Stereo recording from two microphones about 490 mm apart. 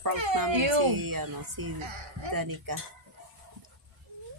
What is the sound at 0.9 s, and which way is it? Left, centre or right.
A woman's voice, right.